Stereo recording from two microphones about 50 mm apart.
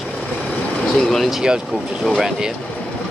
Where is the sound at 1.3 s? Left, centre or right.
Centre.